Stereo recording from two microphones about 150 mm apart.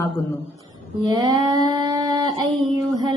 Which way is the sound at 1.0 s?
25° right (ahead or behind).